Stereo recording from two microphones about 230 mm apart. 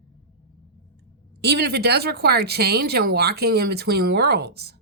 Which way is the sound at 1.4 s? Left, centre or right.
Right.